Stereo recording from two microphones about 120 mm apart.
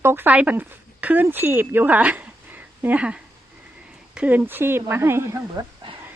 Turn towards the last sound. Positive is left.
turn(degrees=-25)  # may be behind; listen again after turning